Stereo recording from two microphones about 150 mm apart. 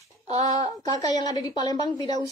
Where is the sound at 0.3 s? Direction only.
50° right (ahead or behind).